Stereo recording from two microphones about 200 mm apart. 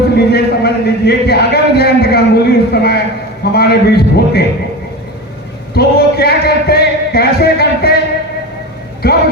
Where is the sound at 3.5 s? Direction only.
55° left (ahead or behind).